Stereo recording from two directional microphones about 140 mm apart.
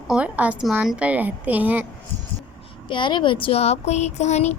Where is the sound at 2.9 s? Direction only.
35° left (ahead or behind); by 4.5 s 55° left (ahead or behind).